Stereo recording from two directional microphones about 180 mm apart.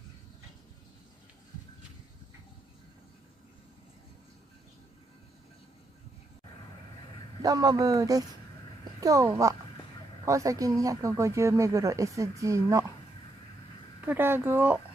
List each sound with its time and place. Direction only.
7.4 s a child's voice: 20° right (ahead or behind)
14.0 s speech: 10° right (ahead or behind)